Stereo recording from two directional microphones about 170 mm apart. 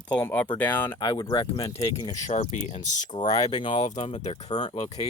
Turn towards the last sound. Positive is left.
turn(degrees=30)  # may be behind; listen again after turning